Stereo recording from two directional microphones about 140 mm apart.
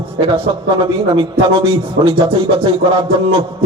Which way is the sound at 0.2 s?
35° right (ahead or behind).